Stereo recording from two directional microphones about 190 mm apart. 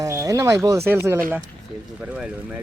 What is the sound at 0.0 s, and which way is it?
Speech, 20° right (ahead or behind).